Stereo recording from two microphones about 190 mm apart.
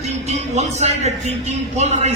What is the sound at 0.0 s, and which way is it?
A man's voice, 35° right (ahead or behind).